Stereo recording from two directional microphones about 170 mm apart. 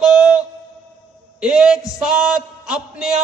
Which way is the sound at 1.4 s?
5° right (ahead or behind).